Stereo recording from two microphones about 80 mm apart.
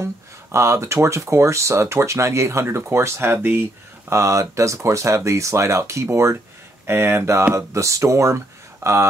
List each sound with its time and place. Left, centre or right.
0.0 s speech: right
4.1 s speech: right